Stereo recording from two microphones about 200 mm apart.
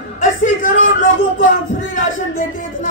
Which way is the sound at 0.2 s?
40° left (ahead or behind).